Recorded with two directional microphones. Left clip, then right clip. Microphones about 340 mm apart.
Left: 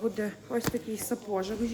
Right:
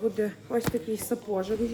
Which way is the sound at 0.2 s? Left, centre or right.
Centre.